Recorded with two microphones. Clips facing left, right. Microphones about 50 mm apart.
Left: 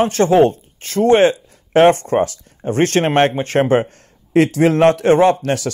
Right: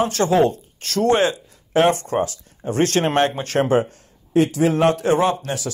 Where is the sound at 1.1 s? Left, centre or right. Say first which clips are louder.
Left 6 dB; left.